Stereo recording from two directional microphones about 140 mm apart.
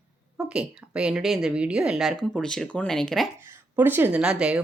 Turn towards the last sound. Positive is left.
turn(degrees=-5)  # may be behind; listen again after turning